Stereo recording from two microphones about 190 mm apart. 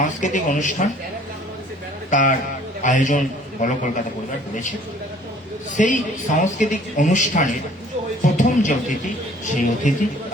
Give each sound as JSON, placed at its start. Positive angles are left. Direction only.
{"t": 0.0, "sound": "speech", "side_deg": 40}
{"t": 2.0, "sound": "a man's voice", "side_deg": 40}
{"t": 5.7, "sound": "speech", "side_deg": 40}